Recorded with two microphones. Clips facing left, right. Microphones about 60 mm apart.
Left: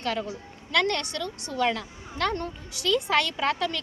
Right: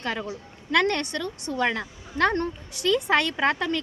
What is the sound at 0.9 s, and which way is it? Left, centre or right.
A woman's voice, right.